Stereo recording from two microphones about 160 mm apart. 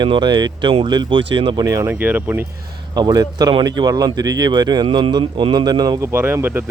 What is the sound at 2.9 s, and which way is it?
Speech, 25° right (ahead or behind).